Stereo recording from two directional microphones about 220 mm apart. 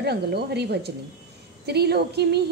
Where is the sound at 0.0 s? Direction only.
45° right (ahead or behind).